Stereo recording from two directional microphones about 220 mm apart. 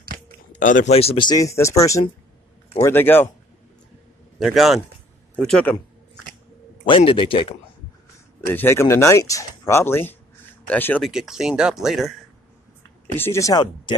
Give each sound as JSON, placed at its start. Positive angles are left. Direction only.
{"t": 0.5, "sound": "speech", "side_deg": 35}
{"t": 4.4, "sound": "speech", "side_deg": 0}
{"t": 6.9, "sound": "speech", "side_deg": 25}
{"t": 8.5, "sound": "speech", "side_deg": 10}
{"t": 13.2, "sound": "speech", "side_deg": 15}